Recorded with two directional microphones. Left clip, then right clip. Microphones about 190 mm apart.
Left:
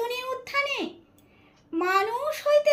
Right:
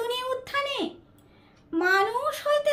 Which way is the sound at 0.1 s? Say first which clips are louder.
Right 1 dB; 20° right (ahead or behind).